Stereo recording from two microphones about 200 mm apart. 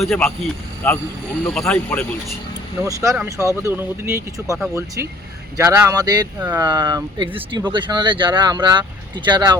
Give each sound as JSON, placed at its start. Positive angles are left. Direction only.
{"t": 0.0, "sound": "speech", "side_deg": 5}
{"t": 2.8, "sound": "speech", "side_deg": -15}
{"t": 5.5, "sound": "speech", "side_deg": -15}